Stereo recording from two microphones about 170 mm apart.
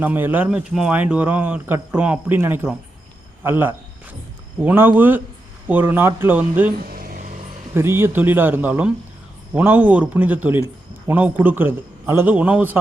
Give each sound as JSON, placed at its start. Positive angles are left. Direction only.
{"t": 0.0, "sound": "a man's voice", "side_deg": -10}
{"t": 6.7, "sound": "vehicle", "side_deg": -55}
{"t": 7.7, "sound": "a man's voice", "side_deg": -15}